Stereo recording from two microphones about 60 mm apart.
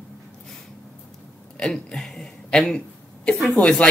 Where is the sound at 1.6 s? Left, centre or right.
Centre.